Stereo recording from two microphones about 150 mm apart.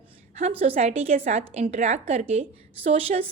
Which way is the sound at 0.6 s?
40° right (ahead or behind).